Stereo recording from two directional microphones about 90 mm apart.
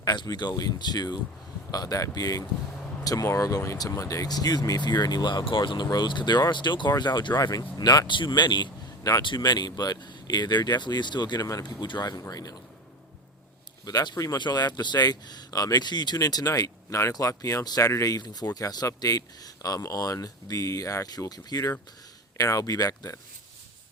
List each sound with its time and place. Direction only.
0.0 s speech: 50° left (ahead or behind)
13.8 s speech: 50° left (ahead or behind)